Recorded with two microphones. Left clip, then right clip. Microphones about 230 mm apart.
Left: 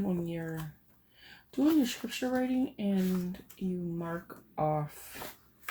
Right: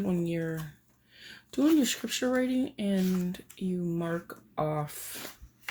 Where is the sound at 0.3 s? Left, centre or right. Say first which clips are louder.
Right 5 dB; right.